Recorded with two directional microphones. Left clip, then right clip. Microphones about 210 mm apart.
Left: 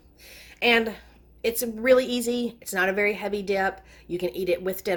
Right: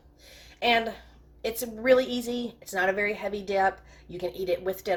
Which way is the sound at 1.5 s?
50° left (ahead or behind).